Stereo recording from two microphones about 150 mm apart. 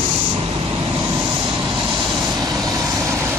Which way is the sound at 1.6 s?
30° right (ahead or behind).